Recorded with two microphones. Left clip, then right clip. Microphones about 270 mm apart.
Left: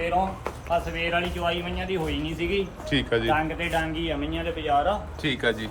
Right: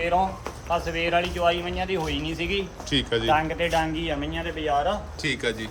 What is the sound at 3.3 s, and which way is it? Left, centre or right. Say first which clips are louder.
Speech: right 3 dB; right.